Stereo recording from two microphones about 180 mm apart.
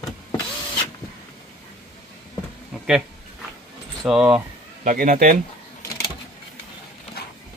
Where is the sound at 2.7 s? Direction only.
5° right (ahead or behind).